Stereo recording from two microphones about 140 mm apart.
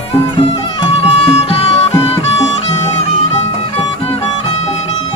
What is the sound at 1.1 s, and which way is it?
Music, 45° left (ahead or behind).